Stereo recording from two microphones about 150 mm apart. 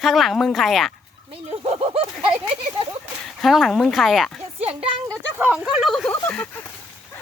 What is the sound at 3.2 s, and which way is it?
Speech, centre (ahead or behind).